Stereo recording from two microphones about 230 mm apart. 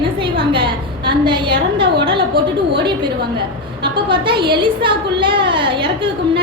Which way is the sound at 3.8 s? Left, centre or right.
Right.